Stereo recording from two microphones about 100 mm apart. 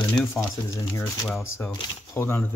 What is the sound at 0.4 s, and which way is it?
Speech, 30° left (ahead or behind).